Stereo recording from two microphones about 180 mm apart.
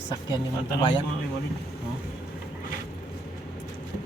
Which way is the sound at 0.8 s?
25° left (ahead or behind).